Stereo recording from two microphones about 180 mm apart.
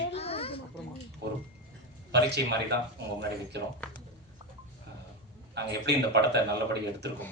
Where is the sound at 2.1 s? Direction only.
70° right (ahead or behind).